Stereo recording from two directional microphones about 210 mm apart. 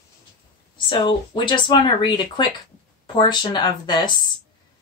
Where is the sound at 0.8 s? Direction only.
25° left (ahead or behind).